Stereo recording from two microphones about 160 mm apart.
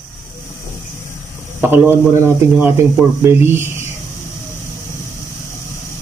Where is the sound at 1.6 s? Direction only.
15° right (ahead or behind).